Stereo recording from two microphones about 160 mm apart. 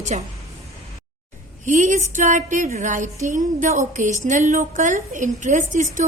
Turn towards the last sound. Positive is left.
turn(degrees=-50)  # may be behind; listen again after turning